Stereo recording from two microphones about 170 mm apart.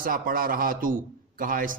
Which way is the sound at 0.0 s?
55° right (ahead or behind).